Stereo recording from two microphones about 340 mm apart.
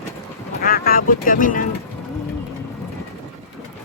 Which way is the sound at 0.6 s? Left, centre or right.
Left.